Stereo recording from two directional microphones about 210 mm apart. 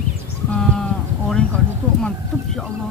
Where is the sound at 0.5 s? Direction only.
5° left (ahead or behind).